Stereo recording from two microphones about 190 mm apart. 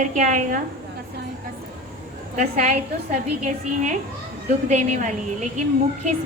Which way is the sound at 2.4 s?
40° right (ahead or behind).